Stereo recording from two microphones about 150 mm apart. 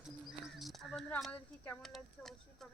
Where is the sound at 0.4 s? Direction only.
Centre (ahead or behind).